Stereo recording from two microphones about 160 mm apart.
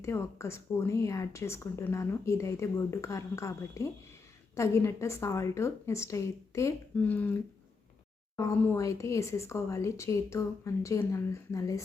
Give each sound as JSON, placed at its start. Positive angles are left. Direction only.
{"t": 0.0, "sound": "a woman's voice", "side_deg": 15}
{"t": 8.4, "sound": "speech", "side_deg": 15}